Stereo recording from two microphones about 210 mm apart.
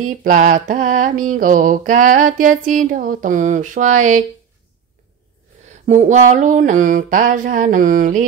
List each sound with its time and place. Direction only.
0.2 s mantra: 40° right (ahead or behind)
5.7 s mantra: 35° right (ahead or behind)